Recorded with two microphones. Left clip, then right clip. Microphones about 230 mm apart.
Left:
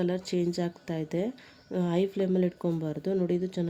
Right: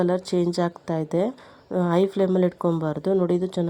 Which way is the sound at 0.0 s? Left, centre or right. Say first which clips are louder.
Right 7 dB; centre.